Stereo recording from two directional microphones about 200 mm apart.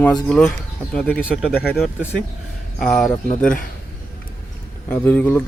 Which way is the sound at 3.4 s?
45° left (ahead or behind).